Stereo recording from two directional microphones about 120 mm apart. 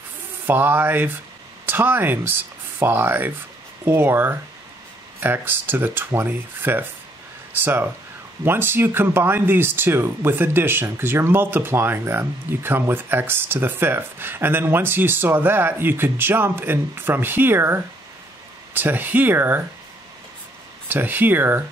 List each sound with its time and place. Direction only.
0.5 s speech: 15° right (ahead or behind)
20.9 s speech: 15° right (ahead or behind)